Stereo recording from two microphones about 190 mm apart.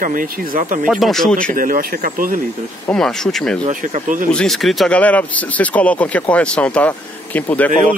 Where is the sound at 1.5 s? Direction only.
45° right (ahead or behind).